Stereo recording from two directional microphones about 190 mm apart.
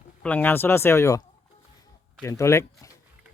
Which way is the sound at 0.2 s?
10° left (ahead or behind).